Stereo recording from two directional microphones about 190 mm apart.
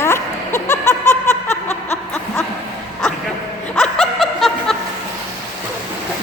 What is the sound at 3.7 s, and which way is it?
Snicker, centre (ahead or behind).